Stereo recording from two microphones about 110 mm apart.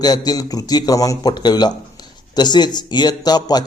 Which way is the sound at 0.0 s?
40° left (ahead or behind).